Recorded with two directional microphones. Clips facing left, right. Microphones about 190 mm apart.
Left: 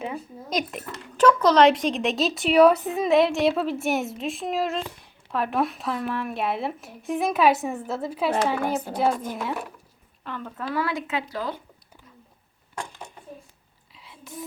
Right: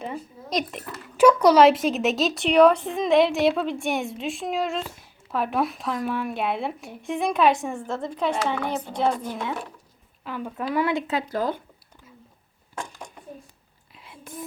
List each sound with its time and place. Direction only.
0.0 s speech: centre (ahead or behind)
10.2 s speech: 10° right (ahead or behind)
11.0 s speech: 40° right (ahead or behind)
13.9 s a sound: 55° right (ahead or behind)